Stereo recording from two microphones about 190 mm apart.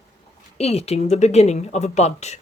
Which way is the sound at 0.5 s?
35° left (ahead or behind).